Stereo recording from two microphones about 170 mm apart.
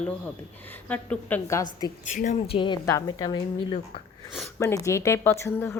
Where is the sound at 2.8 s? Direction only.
20° left (ahead or behind).